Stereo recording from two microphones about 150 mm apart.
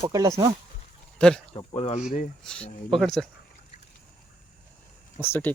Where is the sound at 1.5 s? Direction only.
40° left (ahead or behind).